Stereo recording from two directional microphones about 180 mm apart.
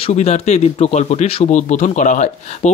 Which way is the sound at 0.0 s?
35° left (ahead or behind).